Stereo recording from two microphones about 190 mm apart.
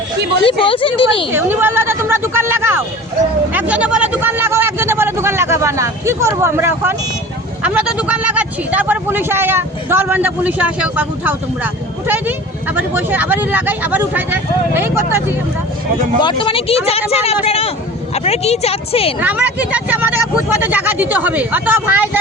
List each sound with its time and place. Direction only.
0.6 s speech: 25° left (ahead or behind)
1.3 s speech: 10° right (ahead or behind)
16.2 s speech: 25° left (ahead or behind)
19.2 s speech: 10° right (ahead or behind)